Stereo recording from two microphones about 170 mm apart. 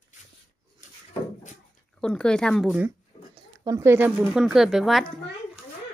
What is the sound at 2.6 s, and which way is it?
Speech, 5° right (ahead or behind).